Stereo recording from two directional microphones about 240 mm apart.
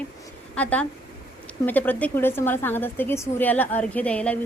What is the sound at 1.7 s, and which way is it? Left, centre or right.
A woman's voice, centre.